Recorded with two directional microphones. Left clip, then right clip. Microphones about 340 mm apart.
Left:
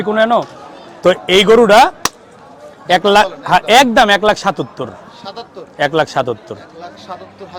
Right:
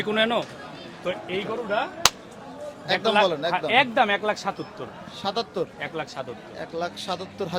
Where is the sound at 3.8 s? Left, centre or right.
Left.